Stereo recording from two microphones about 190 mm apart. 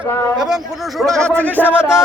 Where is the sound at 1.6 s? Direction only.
5° right (ahead or behind).